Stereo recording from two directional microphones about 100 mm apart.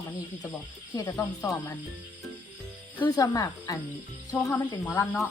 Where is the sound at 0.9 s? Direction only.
35° left (ahead or behind).